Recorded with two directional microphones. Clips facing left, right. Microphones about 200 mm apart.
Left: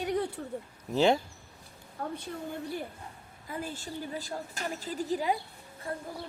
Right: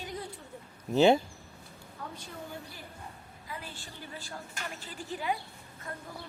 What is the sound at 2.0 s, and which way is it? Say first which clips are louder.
Speech: left 7 dB; 50° left (ahead or behind).